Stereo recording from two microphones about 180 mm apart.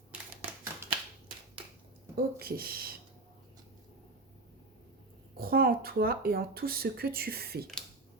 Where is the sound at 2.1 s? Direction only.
55° right (ahead or behind).